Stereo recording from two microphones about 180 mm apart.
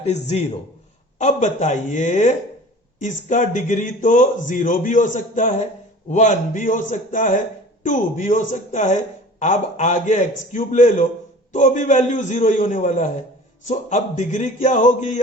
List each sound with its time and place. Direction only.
0.0 s a man's voice: 35° left (ahead or behind)